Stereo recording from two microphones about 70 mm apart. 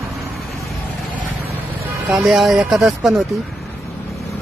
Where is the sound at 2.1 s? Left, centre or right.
Centre.